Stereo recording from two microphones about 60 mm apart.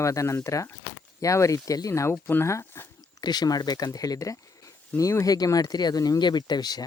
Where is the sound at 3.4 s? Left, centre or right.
Left.